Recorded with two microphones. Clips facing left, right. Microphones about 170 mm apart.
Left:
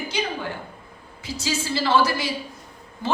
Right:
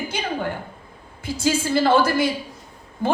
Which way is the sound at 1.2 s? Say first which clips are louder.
Right 6 dB; 55° right (ahead or behind).